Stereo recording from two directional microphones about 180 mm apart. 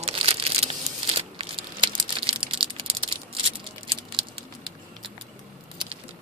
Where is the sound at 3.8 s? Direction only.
30° right (ahead or behind).